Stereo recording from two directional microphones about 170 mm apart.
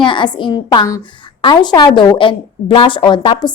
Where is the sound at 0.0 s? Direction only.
30° left (ahead or behind).